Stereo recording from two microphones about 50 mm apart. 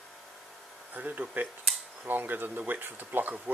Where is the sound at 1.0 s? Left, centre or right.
Right.